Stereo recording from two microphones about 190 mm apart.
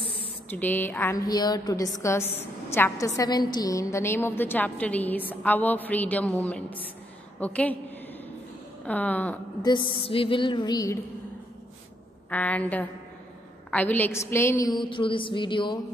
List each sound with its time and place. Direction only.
0.5 s a woman's voice: 10° left (ahead or behind)
8.8 s a woman's voice: 10° left (ahead or behind)
9.6 s a woman's voice: 20° left (ahead or behind)
12.3 s a woman's voice: 10° left (ahead or behind); by 15.8 s 25° left (ahead or behind)